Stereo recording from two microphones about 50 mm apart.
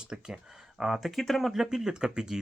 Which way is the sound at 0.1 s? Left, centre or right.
Centre.